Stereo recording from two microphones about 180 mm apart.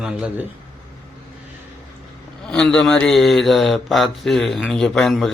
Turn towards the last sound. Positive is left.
turn(degrees=5)  # may be behind; listen again after turning